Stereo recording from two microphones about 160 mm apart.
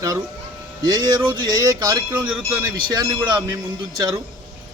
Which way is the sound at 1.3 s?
20° right (ahead or behind).